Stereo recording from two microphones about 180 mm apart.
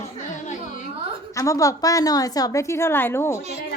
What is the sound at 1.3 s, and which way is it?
A woman's voice, 15° left (ahead or behind).